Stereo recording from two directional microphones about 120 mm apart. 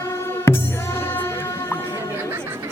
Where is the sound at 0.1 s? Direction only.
20° left (ahead or behind).